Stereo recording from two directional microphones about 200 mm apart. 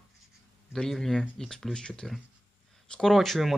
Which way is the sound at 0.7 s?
Centre (ahead or behind).